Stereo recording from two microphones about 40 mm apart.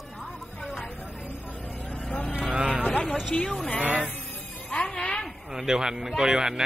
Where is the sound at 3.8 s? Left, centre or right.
Right.